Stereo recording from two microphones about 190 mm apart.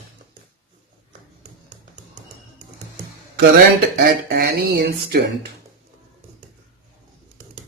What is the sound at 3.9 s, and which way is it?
Speech, 50° right (ahead or behind).